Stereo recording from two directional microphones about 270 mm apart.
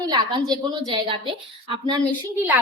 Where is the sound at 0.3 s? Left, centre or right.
Centre.